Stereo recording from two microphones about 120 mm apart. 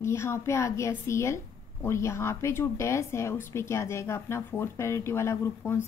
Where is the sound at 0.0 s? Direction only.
20° left (ahead or behind).